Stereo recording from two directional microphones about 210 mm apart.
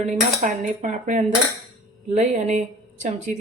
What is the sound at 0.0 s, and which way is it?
Speech, 35° right (ahead or behind).